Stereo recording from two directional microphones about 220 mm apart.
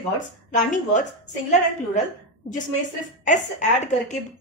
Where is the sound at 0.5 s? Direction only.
35° left (ahead or behind).